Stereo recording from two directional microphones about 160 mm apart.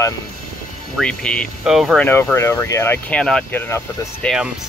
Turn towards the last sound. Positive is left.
turn(degrees=-5)  # may be behind; listen again after turning